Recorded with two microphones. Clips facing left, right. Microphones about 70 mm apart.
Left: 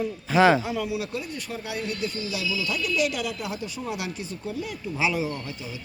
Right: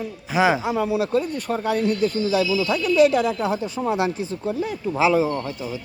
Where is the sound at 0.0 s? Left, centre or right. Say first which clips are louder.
Left 1 dB; centre; by 1.2 s right.